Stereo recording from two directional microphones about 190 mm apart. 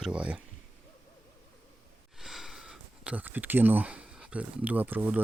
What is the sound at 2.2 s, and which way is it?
Speech, centre (ahead or behind).